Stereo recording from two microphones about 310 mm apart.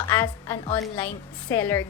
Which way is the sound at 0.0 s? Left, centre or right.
Centre.